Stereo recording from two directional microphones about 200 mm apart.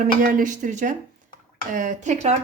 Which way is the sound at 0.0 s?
45° right (ahead or behind).